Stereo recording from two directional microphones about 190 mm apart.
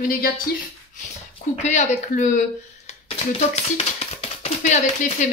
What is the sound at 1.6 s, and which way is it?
Speech, 35° left (ahead or behind).